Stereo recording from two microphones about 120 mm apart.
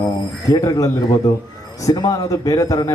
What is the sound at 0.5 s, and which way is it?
A man's voice, 30° left (ahead or behind).